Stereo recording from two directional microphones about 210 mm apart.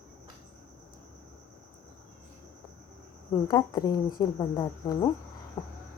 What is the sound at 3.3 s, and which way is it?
A woman's voice, 20° left (ahead or behind).